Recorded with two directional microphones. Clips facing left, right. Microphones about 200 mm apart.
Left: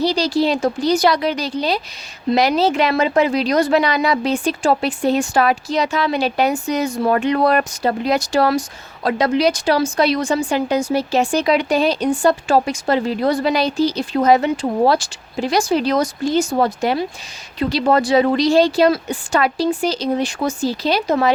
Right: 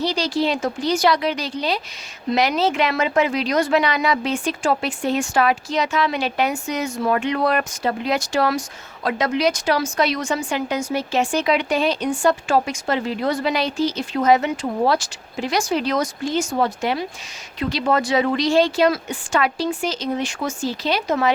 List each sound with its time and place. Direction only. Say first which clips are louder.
0.0 s a woman's voice: left 4 dB; 35° left (ahead or behind)